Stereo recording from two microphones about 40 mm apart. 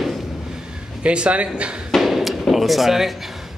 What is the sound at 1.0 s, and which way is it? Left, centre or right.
Speech, right.